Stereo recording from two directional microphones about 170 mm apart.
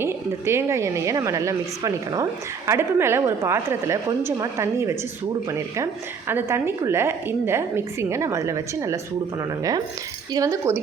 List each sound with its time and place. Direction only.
0.0 s a woman's voice: 15° right (ahead or behind)
10.3 s a woman's voice: 15° right (ahead or behind)